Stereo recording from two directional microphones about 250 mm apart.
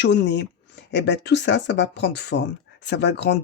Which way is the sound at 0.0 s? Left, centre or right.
Left.